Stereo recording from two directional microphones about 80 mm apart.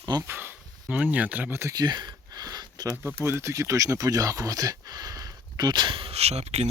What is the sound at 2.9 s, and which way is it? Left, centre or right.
Speech, right.